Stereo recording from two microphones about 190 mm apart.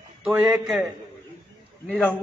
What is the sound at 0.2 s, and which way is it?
Speech, 5° right (ahead or behind).